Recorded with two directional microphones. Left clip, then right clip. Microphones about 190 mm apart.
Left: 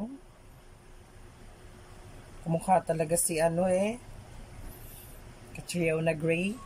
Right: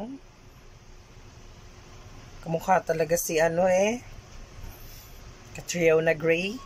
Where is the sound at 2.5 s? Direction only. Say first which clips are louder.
Right 3 dB; 15° left (ahead or behind).